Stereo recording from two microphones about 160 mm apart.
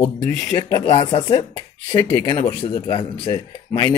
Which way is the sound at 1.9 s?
20° left (ahead or behind).